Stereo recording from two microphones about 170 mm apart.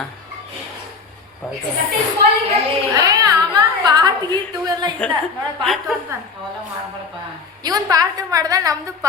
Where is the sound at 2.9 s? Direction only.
20° right (ahead or behind).